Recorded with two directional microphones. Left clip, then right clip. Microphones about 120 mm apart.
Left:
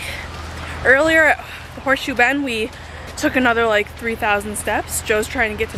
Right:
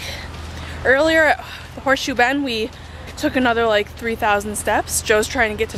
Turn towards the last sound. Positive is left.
turn(degrees=-15)  # may be behind; listen again after turning